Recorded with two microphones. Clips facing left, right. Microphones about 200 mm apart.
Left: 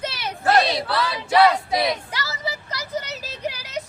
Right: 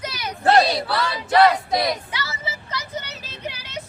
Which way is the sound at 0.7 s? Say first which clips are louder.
Even; 5° left (ahead or behind).